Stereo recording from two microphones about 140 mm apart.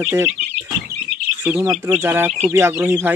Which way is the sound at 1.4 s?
10° right (ahead or behind).